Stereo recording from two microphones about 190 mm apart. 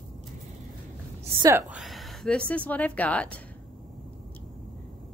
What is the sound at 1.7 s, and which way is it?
Speech, centre (ahead or behind).